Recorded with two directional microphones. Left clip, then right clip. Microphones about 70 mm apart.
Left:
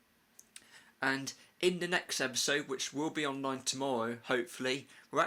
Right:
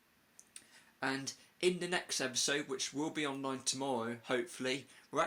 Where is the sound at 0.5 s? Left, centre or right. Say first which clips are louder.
Left 4 dB; left.